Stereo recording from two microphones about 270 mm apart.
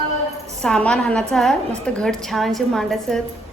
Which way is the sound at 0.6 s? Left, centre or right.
Centre.